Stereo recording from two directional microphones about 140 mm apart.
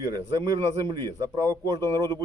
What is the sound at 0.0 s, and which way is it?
A man's voice, 25° right (ahead or behind).